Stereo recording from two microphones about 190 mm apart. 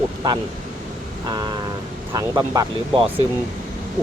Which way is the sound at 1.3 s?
20° right (ahead or behind).